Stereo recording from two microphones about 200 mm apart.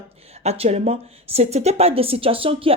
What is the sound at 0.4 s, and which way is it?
Speech, 30° right (ahead or behind).